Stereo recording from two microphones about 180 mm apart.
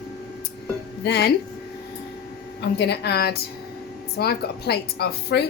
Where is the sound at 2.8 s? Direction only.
65° left (ahead or behind).